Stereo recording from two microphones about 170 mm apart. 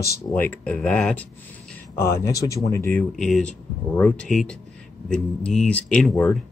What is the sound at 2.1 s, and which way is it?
Speech, 20° left (ahead or behind).